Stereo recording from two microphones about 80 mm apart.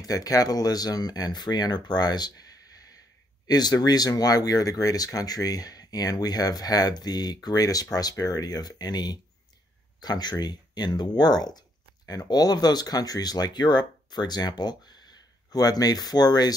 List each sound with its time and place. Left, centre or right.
0.0 s speech: left
3.4 s speech: left